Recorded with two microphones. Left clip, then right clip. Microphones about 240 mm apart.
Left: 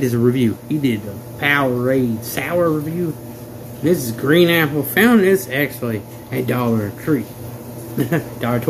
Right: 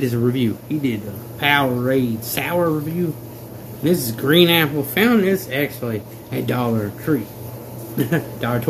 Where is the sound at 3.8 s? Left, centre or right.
Centre.